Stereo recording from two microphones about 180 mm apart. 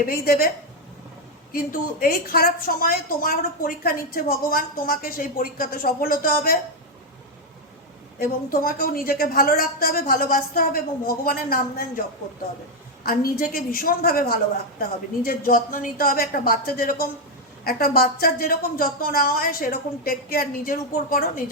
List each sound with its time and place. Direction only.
0.0 s a woman's voice: 55° left (ahead or behind)
1.5 s a woman's voice: 55° left (ahead or behind)
8.2 s a woman's voice: 55° left (ahead or behind)